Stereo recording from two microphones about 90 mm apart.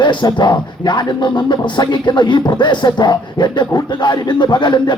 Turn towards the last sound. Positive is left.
turn(degrees=55)  # may be behind; listen again after turning